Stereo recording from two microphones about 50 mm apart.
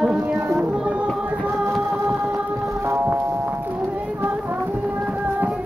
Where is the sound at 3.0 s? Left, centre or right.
Right.